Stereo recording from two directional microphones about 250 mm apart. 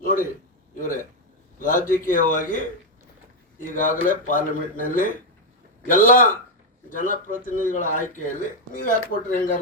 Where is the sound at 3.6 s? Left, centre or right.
Left.